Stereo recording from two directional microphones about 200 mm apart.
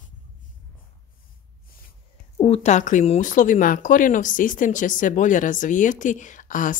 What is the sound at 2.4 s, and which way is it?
Speech, 30° left (ahead or behind).